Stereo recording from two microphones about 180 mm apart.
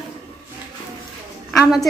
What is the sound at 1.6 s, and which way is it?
Speech, centre (ahead or behind).